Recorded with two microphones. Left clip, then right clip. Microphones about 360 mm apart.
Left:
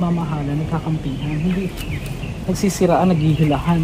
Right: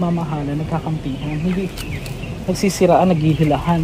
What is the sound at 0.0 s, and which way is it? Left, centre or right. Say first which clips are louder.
Speech: right 1 dB; centre.